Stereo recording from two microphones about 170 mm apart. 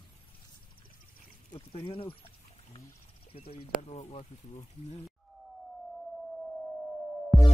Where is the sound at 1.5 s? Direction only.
35° left (ahead or behind).